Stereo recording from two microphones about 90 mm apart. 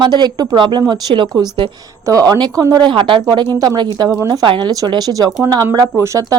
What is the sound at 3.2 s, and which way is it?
Speech, 50° right (ahead or behind).